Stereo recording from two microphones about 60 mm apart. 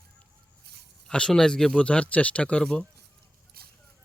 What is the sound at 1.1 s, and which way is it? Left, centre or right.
Speech, centre.